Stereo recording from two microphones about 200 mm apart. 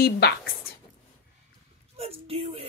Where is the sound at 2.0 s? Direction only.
30° right (ahead or behind).